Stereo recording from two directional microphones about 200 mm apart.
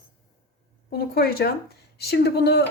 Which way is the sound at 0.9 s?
50° left (ahead or behind).